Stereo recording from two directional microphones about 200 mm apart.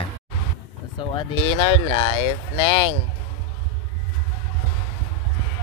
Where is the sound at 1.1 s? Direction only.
25° left (ahead or behind).